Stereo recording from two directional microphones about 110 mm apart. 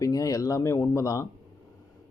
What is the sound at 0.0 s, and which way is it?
Speech, 30° left (ahead or behind).